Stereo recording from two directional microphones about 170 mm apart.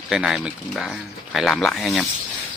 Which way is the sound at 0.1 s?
Centre (ahead or behind).